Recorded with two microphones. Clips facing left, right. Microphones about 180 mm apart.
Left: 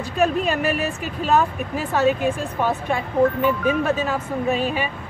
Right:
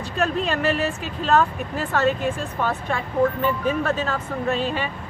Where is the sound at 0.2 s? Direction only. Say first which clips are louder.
Left 3 dB; 10° left (ahead or behind).